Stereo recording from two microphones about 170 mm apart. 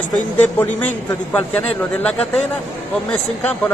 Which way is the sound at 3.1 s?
10° left (ahead or behind).